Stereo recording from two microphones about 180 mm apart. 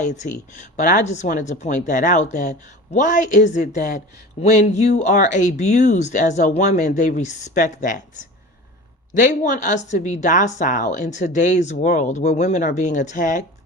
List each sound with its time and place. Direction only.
0.0 s speech: 40° left (ahead or behind)
9.2 s a woman's voice: 45° left (ahead or behind)